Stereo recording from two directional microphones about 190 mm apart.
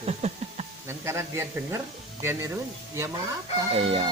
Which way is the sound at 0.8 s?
15° right (ahead or behind).